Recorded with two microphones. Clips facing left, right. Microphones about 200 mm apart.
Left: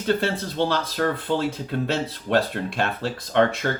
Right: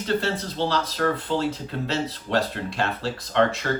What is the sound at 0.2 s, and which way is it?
Speech, 55° left (ahead or behind).